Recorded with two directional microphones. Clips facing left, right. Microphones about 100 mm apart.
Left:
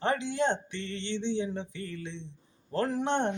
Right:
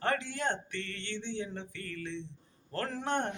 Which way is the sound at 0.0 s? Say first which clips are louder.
Left 4 dB; 20° left (ahead or behind).